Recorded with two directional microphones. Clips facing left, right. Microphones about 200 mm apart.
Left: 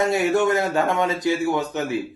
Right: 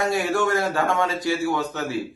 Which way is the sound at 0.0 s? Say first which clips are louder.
Left 3 dB; 20° left (ahead or behind).